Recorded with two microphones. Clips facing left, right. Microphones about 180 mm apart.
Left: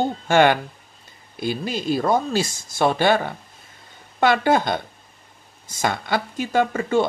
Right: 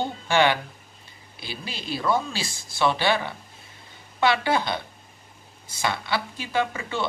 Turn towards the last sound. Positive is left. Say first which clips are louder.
# left 7 dB
turn(degrees=45)  # may be behind; listen again after turning